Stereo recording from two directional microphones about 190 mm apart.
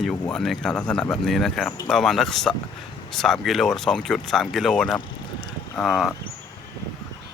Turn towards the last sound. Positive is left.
turn(degrees=0)  # may be behind; listen again after turning